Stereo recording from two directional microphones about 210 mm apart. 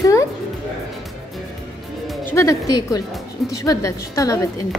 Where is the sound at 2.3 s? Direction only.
15° left (ahead or behind).